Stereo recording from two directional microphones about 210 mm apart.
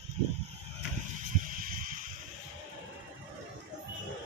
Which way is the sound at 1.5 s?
40° right (ahead or behind).